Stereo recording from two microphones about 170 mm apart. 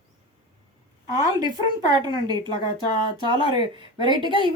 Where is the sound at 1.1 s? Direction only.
20° right (ahead or behind).